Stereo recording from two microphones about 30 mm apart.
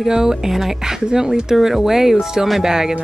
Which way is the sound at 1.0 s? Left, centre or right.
Right.